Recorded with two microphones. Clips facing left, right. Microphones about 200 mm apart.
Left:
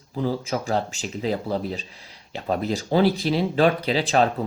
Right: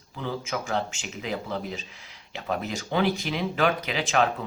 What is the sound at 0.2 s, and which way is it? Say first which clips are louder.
Speech: left 6 dB; 35° left (ahead or behind).